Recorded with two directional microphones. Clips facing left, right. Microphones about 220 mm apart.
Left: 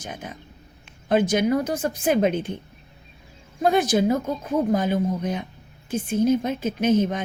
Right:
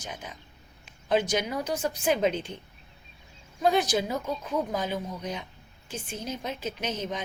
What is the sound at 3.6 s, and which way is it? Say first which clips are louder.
A woman's voice: left 5 dB; 50° left (ahead or behind).